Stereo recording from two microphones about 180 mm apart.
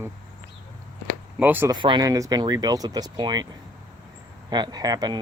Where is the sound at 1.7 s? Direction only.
25° right (ahead or behind).